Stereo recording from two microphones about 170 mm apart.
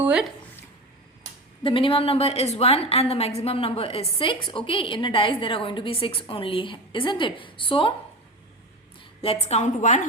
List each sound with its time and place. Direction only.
0.0 s speech: 5° right (ahead or behind)
1.6 s a woman's voice: 30° left (ahead or behind)
9.2 s a woman's voice: 35° left (ahead or behind)